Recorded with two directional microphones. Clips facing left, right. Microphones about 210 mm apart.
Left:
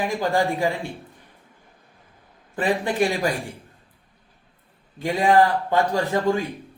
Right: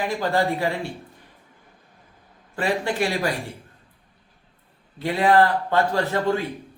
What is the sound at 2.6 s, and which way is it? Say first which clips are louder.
Speech: left 2 dB; 15° left (ahead or behind).